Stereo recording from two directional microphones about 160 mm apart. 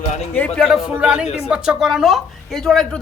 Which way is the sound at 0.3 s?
10° left (ahead or behind).